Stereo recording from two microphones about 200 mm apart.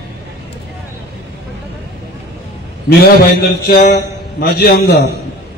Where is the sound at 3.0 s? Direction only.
50° left (ahead or behind).